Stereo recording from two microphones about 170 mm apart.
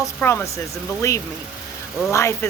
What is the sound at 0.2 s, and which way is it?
Speech, 15° left (ahead or behind).